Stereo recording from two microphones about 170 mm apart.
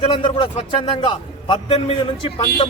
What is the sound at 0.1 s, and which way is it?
A man's voice, 30° left (ahead or behind).